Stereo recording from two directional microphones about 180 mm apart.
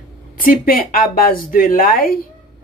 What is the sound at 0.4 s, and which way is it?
Speech, 50° left (ahead or behind).